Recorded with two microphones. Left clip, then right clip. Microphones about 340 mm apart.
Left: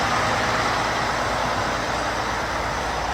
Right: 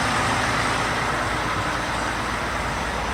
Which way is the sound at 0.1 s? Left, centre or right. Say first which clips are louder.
Left 1 dB; left.